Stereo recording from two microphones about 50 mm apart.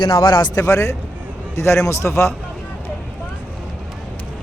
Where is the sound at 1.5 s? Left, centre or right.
Left.